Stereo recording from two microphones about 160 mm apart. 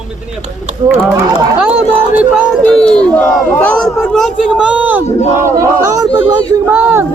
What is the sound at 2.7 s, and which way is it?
A man's voice, 5° left (ahead or behind).